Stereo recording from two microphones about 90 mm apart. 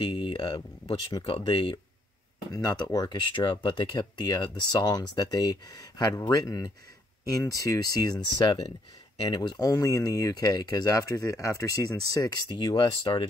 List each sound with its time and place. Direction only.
0.0 s speech: 60° left (ahead or behind)
2.5 s speech: 45° left (ahead or behind)